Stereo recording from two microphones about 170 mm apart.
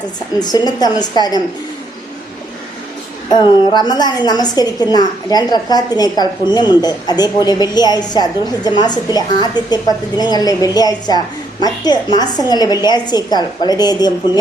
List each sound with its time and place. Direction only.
0.3 s a woman's voice: 25° left (ahead or behind)
3.2 s a woman's voice: 25° left (ahead or behind)